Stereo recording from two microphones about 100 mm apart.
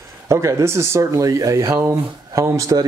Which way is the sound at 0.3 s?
30° right (ahead or behind).